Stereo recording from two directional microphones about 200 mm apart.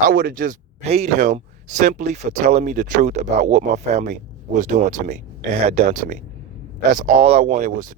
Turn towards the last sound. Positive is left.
turn(degrees=-40)  # may be behind; listen again after turning